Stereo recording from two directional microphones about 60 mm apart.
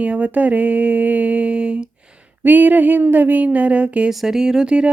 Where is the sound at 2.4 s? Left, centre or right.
Right.